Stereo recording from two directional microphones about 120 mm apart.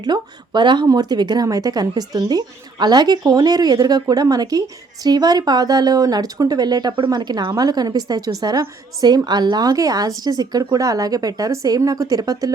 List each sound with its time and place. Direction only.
0.0 s speech: 40° right (ahead or behind)